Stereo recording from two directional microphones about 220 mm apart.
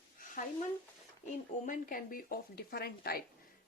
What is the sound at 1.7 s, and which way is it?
Speech, 40° left (ahead or behind).